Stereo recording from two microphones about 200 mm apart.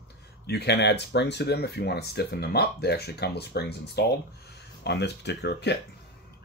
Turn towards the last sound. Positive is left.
turn(degrees=55)  # may be behind; listen again after turning